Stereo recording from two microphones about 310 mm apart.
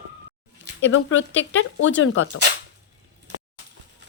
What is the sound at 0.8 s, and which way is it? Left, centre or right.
A woman's voice, left.